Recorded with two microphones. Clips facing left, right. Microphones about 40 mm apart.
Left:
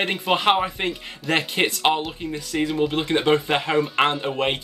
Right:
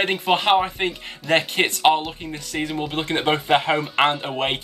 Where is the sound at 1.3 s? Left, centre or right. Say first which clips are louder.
Right 2 dB; right.